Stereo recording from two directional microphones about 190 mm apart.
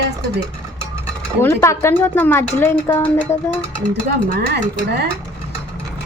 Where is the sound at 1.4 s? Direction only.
15° left (ahead or behind).